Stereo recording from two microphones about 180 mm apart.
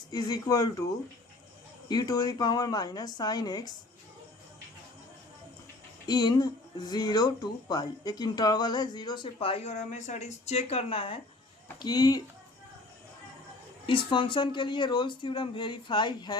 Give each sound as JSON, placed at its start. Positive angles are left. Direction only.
{"t": 0.1, "sound": "speech", "side_deg": 20}
{"t": 1.9, "sound": "speech", "side_deg": 20}
{"t": 6.1, "sound": "speech", "side_deg": 20}
{"t": 13.8, "sound": "speech", "side_deg": 30}